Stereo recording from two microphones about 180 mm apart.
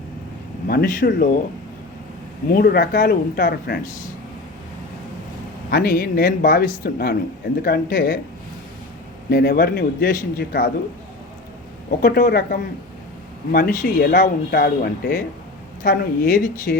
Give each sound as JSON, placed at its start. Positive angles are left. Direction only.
{"t": 0.7, "sound": "speech", "side_deg": 55}
{"t": 2.5, "sound": "speech", "side_deg": 60}
{"t": 5.7, "sound": "speech", "side_deg": 60}
{"t": 9.3, "sound": "speech", "side_deg": 60}
{"t": 11.9, "sound": "speech", "side_deg": 55}